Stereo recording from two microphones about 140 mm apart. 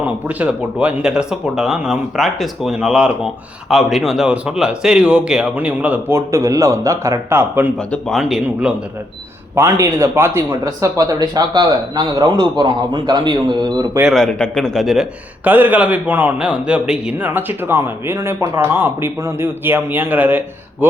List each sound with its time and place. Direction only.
0.0 s a man's voice: 10° right (ahead or behind)
7.9 s a man's voice: 5° left (ahead or behind)
9.6 s speech: 20° right (ahead or behind)
14.1 s speech: 5° left (ahead or behind)
15.4 s a man's voice: 10° right (ahead or behind)